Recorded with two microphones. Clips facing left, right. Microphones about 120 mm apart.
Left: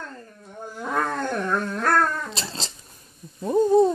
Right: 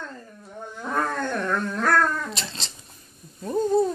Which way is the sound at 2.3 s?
30° left (ahead or behind).